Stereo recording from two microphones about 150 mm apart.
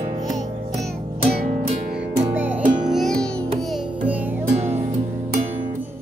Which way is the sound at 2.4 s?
10° right (ahead or behind).